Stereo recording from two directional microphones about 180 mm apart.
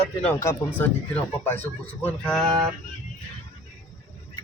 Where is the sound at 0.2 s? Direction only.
10° left (ahead or behind).